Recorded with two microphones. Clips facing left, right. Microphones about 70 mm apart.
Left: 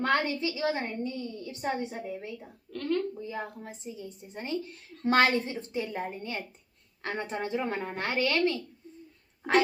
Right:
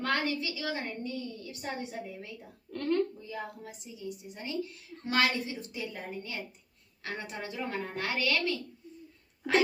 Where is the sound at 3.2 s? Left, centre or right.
Left.